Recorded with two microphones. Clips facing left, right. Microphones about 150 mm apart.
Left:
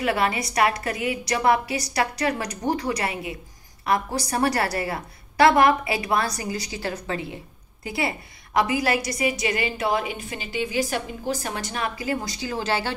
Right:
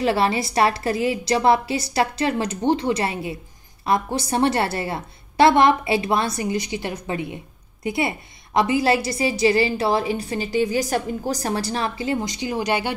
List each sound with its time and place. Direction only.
0.0 s a woman's voice: 30° right (ahead or behind)